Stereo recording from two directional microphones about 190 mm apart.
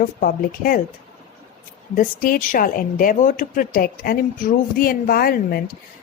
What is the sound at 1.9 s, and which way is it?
Speech, 50° left (ahead or behind).